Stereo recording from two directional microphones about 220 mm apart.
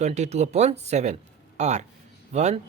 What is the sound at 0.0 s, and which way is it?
Speech, 30° right (ahead or behind).